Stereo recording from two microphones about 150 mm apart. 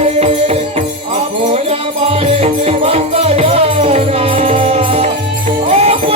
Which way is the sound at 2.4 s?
45° right (ahead or behind).